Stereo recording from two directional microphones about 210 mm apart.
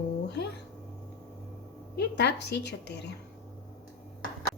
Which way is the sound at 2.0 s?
55° left (ahead or behind).